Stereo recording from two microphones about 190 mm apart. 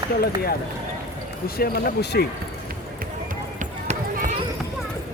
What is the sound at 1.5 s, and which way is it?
Speech, 55° left (ahead or behind).